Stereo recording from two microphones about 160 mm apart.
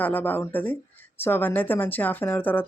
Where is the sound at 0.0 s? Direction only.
10° left (ahead or behind).